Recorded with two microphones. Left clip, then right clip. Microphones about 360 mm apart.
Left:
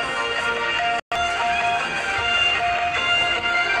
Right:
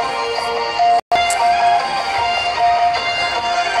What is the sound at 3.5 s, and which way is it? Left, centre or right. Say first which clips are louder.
Music: right 3 dB; centre.